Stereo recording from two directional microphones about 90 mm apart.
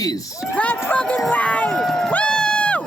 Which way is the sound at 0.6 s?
15° left (ahead or behind).